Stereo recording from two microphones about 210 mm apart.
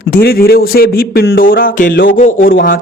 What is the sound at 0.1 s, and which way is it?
Speech, 45° left (ahead or behind).